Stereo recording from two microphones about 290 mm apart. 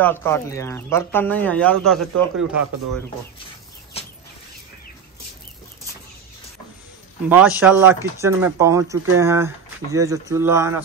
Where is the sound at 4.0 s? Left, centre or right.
Left.